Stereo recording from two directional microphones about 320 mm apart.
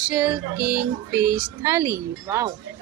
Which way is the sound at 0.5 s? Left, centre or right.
Right.